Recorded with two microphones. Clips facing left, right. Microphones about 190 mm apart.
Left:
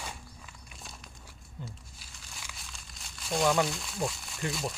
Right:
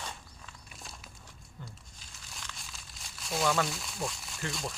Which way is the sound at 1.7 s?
5° left (ahead or behind).